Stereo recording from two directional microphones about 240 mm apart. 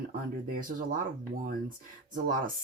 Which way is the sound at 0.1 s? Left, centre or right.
Right.